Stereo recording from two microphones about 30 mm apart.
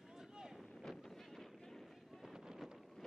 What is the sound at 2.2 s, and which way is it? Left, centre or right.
Wind noise, centre.